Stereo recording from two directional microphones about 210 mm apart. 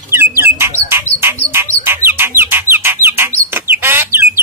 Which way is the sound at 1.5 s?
10° right (ahead or behind).